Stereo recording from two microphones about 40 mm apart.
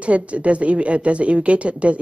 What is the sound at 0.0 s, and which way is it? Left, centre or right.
A woman's voice, right.